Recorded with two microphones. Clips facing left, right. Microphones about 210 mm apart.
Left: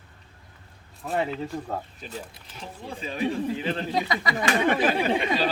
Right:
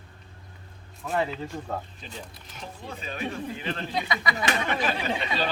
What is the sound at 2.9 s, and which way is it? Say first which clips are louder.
Speech: left 6 dB; 30° left (ahead or behind).